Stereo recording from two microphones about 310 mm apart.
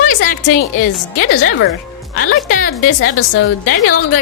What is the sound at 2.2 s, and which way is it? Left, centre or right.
Speech, left.